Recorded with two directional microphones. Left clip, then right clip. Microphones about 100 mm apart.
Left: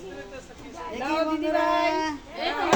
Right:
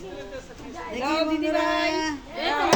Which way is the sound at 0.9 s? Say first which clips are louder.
Right 1 dB; 15° right (ahead or behind).